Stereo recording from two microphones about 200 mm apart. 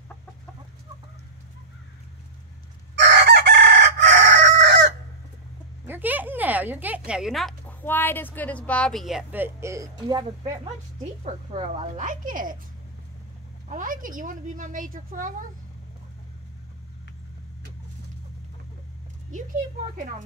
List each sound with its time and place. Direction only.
3.0 s chicken: 60° right (ahead or behind)
5.9 s a sound: 10° right (ahead or behind)
7.1 s speech: 5° right (ahead or behind); by 10.7 s 20° right (ahead or behind)
11.2 s speech: 35° right (ahead or behind)
13.7 s speech: 40° right (ahead or behind)